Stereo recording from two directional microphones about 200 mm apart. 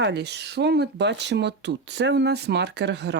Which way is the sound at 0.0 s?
55° right (ahead or behind).